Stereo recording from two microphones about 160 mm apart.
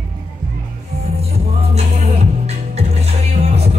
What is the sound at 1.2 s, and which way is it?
Music, 40° right (ahead or behind).